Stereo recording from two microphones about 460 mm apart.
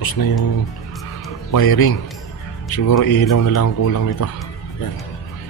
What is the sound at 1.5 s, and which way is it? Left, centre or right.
A man's voice, left.